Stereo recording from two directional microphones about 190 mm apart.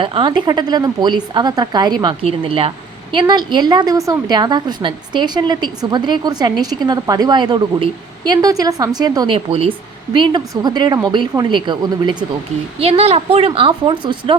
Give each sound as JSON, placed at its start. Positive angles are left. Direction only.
{"t": 0.0, "sound": "a woman's voice", "side_deg": -25}